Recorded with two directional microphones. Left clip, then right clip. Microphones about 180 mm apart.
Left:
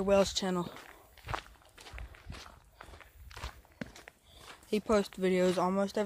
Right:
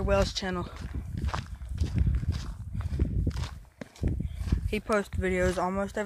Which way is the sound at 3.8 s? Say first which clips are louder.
Right 1 dB; 25° right (ahead or behind).